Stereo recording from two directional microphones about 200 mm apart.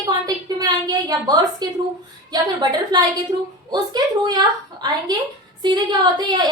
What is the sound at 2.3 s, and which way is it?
A woman's voice, 20° right (ahead or behind).